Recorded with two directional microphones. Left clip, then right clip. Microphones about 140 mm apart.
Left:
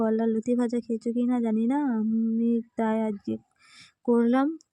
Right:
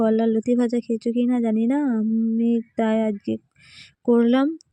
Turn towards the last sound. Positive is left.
turn(degrees=-25)  # may be behind; listen again after turning